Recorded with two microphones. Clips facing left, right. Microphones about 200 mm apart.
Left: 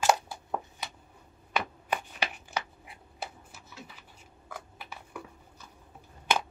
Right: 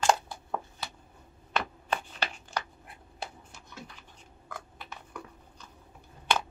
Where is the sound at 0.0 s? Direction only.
15° left (ahead or behind).